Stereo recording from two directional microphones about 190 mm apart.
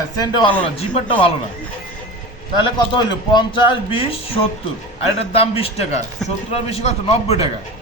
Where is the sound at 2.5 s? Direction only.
25° left (ahead or behind).